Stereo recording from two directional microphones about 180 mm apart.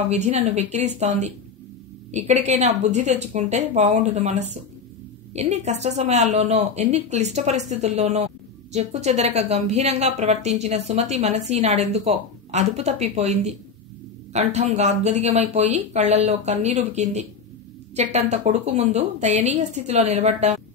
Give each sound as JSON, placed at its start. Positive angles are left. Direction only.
{"t": 0.1, "sound": "a woman's voice", "side_deg": -40}